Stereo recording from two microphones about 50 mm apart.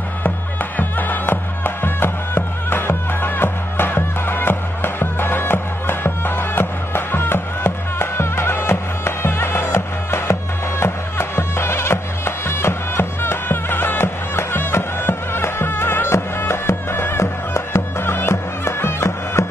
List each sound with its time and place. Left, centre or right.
0.7 s music: left
17.2 s music: left
18.2 s music: left